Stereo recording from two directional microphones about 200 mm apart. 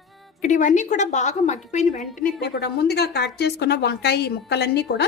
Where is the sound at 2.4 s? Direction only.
55° left (ahead or behind).